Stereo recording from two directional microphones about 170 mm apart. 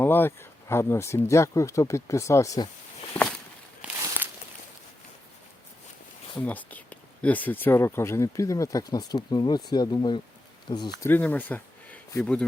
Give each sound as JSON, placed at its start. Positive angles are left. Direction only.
{"t": 0.0, "sound": "speech", "side_deg": 15}
{"t": 3.1, "sound": "walk", "side_deg": 10}
{"t": 3.8, "sound": "a sound", "side_deg": -5}
{"t": 6.3, "sound": "speech", "side_deg": 10}
{"t": 11.1, "sound": "speech", "side_deg": 10}